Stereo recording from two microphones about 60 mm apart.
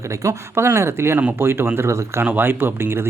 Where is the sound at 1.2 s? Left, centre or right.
Right.